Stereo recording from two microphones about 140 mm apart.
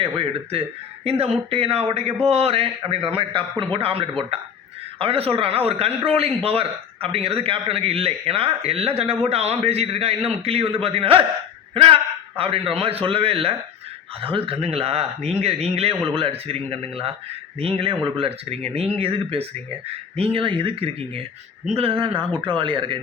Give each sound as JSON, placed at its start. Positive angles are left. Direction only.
{"t": 0.0, "sound": "a man's voice", "side_deg": -40}
{"t": 11.7, "sound": "a sound", "side_deg": -40}
{"t": 12.4, "sound": "a man's voice", "side_deg": -40}